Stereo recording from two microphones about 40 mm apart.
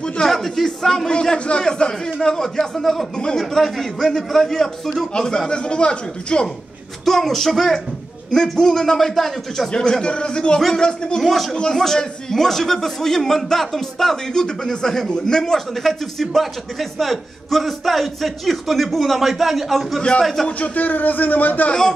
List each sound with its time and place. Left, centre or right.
0.3 s a man's voice: centre; by 6.4 s left
7.1 s a man's voice: centre
9.7 s a man's voice: centre
11.2 s a man's voice: centre
20.4 s speech: left